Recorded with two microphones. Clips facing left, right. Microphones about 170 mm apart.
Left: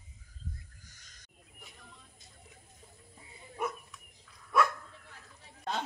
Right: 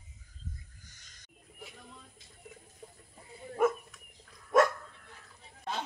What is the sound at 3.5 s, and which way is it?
Dog, 50° right (ahead or behind).